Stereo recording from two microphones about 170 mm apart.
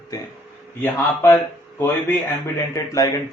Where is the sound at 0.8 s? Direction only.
15° left (ahead or behind).